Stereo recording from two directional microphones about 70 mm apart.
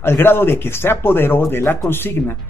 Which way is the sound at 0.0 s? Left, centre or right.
Left.